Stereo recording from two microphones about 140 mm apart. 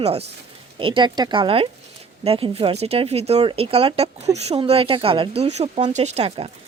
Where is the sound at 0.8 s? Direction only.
35° right (ahead or behind).